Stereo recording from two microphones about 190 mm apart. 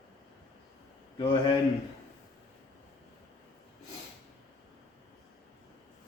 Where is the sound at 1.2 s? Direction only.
25° left (ahead or behind).